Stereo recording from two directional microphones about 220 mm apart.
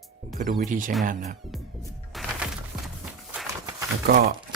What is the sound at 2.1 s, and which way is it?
Music, centre (ahead or behind).